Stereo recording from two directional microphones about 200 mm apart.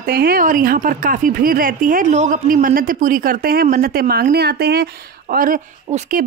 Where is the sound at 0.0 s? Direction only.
50° right (ahead or behind).